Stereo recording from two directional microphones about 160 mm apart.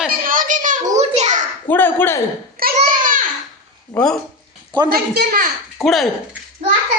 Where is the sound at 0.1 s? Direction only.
60° right (ahead or behind).